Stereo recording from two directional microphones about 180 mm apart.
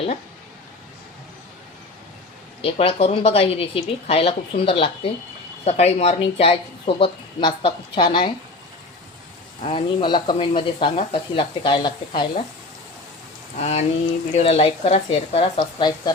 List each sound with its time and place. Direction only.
2.6 s speech: 30° left (ahead or behind)
9.6 s speech: 30° left (ahead or behind)
13.6 s speech: 35° left (ahead or behind)